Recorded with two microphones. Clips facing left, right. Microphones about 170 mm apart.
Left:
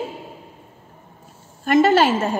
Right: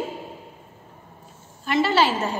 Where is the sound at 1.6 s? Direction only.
50° left (ahead or behind).